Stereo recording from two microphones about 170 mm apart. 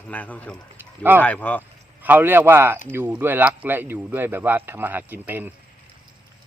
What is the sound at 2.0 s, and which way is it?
Speech, 10° right (ahead or behind).